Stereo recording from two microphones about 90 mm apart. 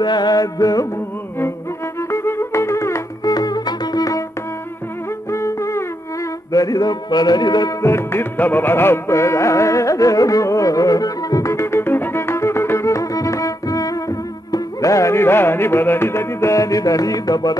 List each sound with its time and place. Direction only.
0.0 s a man's voice: 55° left (ahead or behind)
2.0 s music: 30° left (ahead or behind)
3.3 s music: 50° left (ahead or behind)
5.3 s music: 30° left (ahead or behind)
6.5 s a man's voice: 40° left (ahead or behind)
7.8 s music: 30° left (ahead or behind); by 17.6 s 45° left (ahead or behind)